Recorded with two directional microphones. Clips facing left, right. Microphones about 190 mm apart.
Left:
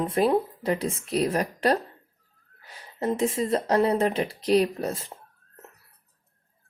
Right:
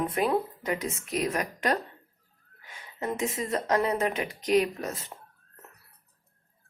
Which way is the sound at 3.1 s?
30° left (ahead or behind).